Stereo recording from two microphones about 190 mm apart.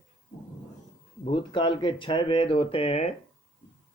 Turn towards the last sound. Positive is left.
turn(degrees=35)  # may be behind; listen again after turning